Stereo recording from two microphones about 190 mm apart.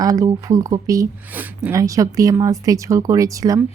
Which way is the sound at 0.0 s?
20° right (ahead or behind).